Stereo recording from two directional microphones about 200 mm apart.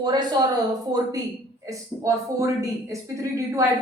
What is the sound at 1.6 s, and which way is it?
Speech, 15° right (ahead or behind).